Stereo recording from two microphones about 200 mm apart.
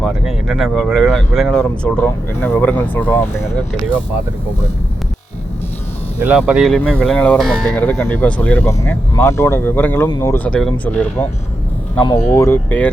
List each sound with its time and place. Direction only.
0.0 s speech: centre (ahead or behind)
6.1 s speech: 5° right (ahead or behind); by 10.3 s 20° left (ahead or behind)
10.3 s speech: 5° left (ahead or behind)
12.3 s speech: 10° left (ahead or behind)